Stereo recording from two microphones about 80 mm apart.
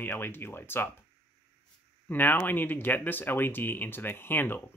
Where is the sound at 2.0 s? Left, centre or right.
Left.